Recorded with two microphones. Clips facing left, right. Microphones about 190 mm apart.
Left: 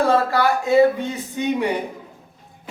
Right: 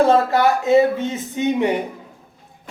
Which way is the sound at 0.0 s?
20° right (ahead or behind).